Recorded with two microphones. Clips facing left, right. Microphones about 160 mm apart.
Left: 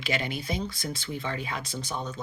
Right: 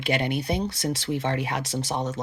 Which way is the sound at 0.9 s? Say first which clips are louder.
Right 7 dB; 75° right (ahead or behind).